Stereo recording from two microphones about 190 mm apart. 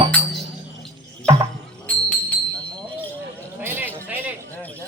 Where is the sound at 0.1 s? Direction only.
5° left (ahead or behind).